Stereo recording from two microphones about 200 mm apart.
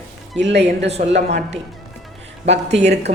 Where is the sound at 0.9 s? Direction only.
30° right (ahead or behind).